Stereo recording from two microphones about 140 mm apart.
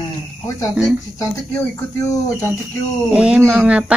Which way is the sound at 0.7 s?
10° right (ahead or behind).